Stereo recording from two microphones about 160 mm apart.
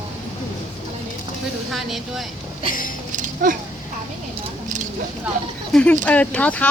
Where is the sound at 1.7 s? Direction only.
Centre (ahead or behind).